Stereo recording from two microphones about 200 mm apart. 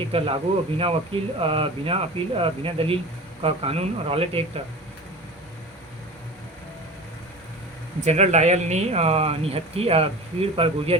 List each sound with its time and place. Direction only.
0.1 s speech: 30° right (ahead or behind)
8.0 s speech: 35° right (ahead or behind)